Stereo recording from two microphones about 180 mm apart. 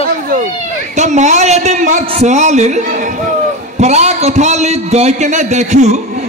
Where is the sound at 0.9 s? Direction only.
40° right (ahead or behind).